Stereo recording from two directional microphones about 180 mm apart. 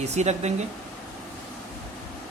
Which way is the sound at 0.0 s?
40° right (ahead or behind).